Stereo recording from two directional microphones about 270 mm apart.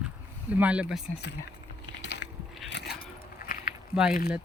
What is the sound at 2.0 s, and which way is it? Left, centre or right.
Biting, left.